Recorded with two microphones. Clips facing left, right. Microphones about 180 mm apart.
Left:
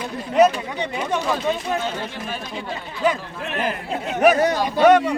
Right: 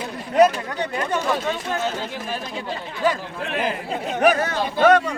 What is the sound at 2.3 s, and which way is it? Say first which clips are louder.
Speech: right 1 dB; 5° right (ahead or behind).